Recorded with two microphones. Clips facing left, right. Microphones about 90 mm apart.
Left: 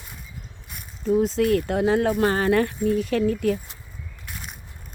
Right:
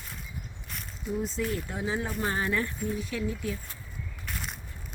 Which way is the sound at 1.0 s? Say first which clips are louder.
Left 11 dB; 90° left.